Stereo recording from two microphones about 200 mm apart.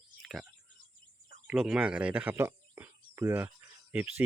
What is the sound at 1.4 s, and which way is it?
Speech, 5° right (ahead or behind).